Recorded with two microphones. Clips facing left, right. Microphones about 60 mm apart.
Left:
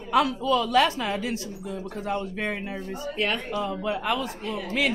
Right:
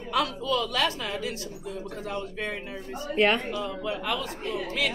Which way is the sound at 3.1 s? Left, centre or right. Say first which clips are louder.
Right 5 dB; right.